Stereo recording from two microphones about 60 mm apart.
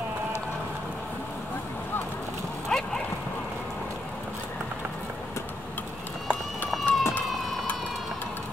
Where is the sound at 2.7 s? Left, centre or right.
Centre.